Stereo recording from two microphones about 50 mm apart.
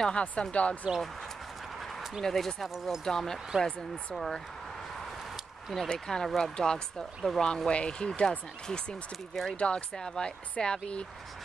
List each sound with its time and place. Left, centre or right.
0.0 s speech: left
2.2 s speech: centre
3.1 s speech: centre
5.7 s speech: centre